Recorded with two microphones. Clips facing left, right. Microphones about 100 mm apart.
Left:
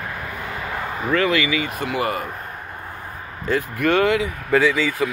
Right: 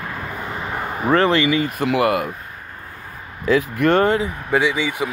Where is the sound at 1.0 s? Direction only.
35° right (ahead or behind).